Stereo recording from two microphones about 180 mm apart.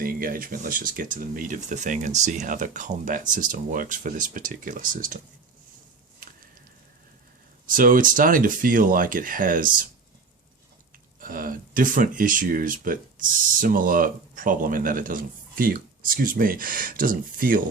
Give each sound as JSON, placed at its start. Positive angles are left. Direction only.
{"t": 0.0, "sound": "speech", "side_deg": -50}
{"t": 6.2, "sound": "a sound", "side_deg": -50}
{"t": 7.7, "sound": "speech", "side_deg": -50}
{"t": 11.2, "sound": "speech", "side_deg": -50}